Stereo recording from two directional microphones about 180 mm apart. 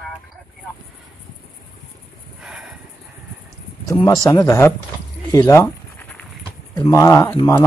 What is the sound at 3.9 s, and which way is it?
Speech, 20° left (ahead or behind).